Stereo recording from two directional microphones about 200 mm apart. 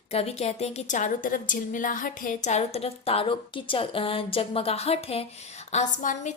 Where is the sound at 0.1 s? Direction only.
30° left (ahead or behind).